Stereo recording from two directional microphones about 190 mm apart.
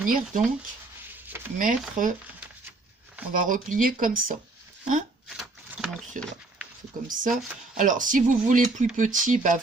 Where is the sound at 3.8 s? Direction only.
45° right (ahead or behind).